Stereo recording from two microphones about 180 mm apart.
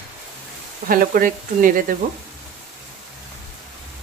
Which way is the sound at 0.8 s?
50° right (ahead or behind).